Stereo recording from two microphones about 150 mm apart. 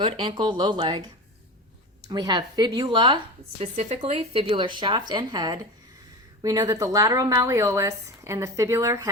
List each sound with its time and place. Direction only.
0.0 s speech: 35° right (ahead or behind)
2.0 s speech: 30° right (ahead or behind)
3.6 s speech: 45° right (ahead or behind); by 9.0 s 20° right (ahead or behind)